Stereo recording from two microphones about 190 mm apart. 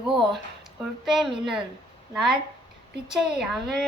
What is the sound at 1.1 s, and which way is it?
A woman's voice, 5° right (ahead or behind).